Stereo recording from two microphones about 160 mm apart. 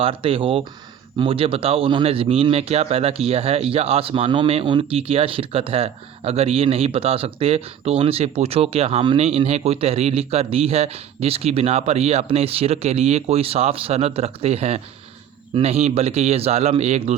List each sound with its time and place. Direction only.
0.0 s a man's voice: 35° right (ahead or behind)